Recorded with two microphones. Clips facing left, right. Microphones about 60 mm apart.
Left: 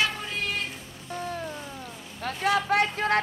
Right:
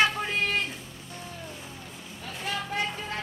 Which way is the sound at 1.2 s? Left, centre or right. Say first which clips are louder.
Left 9 dB; left.